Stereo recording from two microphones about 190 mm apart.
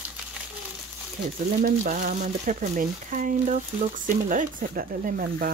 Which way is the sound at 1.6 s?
45° right (ahead or behind).